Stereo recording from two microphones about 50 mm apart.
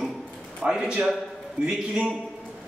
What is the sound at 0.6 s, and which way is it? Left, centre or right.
A man's voice, centre.